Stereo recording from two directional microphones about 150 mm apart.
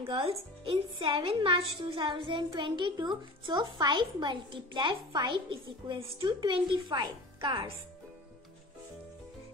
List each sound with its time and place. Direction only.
0.0 s a woman's voice: 40° right (ahead or behind)